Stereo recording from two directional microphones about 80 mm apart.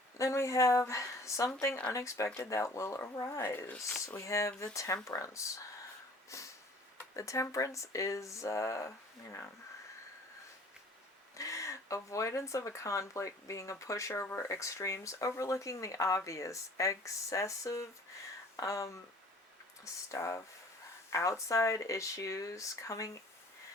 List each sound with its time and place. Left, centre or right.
0.2 s speech: left
6.3 s sniff: left
7.2 s speech: left
11.3 s speech: left
18.5 s a sound: left
19.8 s speech: left